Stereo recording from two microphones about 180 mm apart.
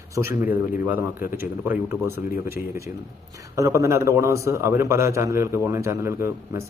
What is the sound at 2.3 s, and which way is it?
Speech, 55° left (ahead or behind).